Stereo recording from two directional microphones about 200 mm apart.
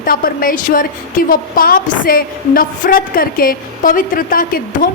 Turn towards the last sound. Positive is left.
turn(degrees=45)  # may be behind; listen again after turning